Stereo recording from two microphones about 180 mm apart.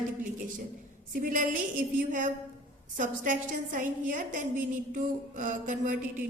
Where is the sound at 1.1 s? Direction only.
50° right (ahead or behind).